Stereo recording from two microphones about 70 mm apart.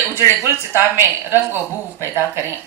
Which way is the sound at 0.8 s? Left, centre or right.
Right.